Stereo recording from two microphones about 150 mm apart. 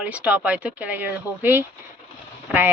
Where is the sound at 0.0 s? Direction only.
10° right (ahead or behind).